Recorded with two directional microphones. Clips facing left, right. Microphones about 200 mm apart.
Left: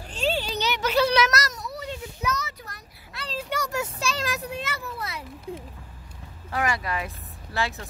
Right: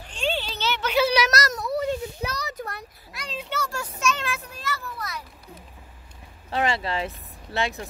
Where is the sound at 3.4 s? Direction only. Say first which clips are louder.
Left 3 dB; 15° left (ahead or behind).